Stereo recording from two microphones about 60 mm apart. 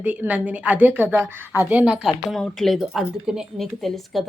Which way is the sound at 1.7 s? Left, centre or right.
Right.